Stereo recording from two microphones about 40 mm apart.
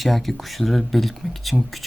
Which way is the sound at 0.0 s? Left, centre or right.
Centre.